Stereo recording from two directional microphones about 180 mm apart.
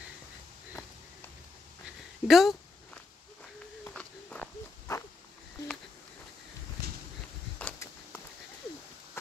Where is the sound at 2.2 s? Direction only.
Centre (ahead or behind).